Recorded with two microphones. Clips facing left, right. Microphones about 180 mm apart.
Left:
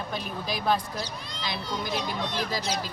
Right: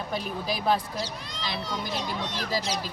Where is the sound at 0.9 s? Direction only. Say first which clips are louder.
Right 1 dB; 80° right.